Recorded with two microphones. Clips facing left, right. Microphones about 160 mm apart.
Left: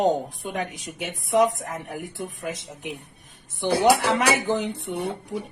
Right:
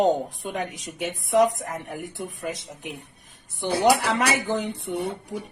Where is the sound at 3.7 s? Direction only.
60° left (ahead or behind).